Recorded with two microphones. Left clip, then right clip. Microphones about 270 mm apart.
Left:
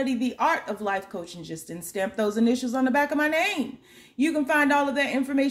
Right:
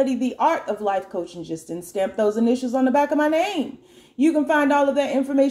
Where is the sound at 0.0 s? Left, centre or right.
Left.